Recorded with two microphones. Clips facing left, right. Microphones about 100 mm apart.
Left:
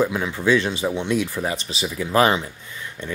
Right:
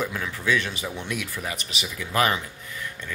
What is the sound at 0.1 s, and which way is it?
Speech, 30° left (ahead or behind).